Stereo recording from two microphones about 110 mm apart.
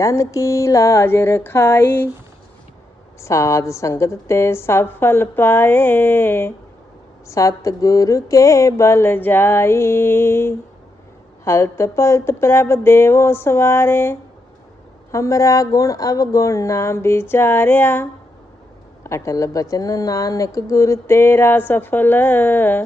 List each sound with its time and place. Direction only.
0.0 s a woman's voice: 30° left (ahead or behind)
3.2 s a woman's voice: 30° left (ahead or behind)